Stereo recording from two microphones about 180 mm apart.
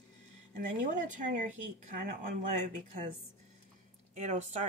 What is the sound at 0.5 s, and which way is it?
Speech, 45° right (ahead or behind).